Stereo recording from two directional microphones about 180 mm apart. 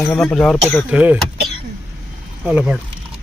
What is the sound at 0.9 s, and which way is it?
Speech, 10° right (ahead or behind).